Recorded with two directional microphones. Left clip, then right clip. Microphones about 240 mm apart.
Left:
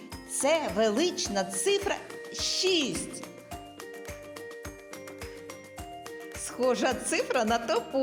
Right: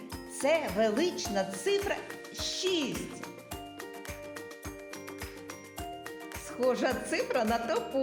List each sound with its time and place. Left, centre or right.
0.4 s speech: left
6.6 s speech: left